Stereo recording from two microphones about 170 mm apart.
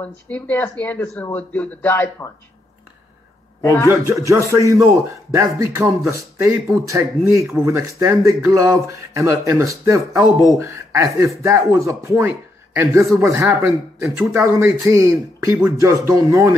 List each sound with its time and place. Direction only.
0.0 s a man's voice: 10° left (ahead or behind)
3.6 s a man's voice: 20° left (ahead or behind)
4.0 s speech: 15° right (ahead or behind)